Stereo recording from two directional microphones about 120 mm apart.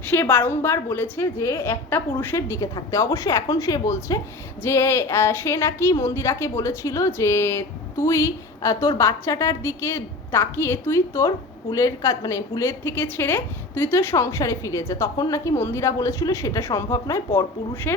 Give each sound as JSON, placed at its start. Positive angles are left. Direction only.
{"t": 0.0, "sound": "a woman's voice", "side_deg": 15}